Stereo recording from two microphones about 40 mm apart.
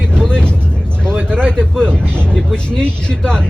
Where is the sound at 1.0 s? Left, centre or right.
Left.